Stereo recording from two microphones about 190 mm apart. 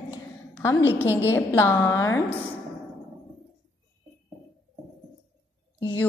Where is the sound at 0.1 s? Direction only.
20° left (ahead or behind).